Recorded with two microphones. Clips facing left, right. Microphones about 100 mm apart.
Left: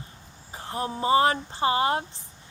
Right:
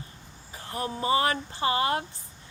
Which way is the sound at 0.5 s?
25° left (ahead or behind).